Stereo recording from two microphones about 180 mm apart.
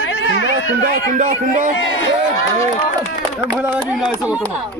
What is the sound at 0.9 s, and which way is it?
Speech, 50° right (ahead or behind).